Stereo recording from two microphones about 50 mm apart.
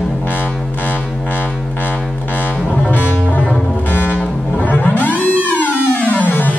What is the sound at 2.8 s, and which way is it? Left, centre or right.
Music, left.